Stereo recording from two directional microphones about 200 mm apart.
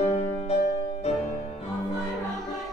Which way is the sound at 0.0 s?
30° left (ahead or behind).